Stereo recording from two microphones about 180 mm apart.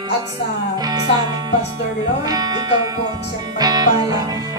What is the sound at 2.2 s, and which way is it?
Speech, 20° right (ahead or behind).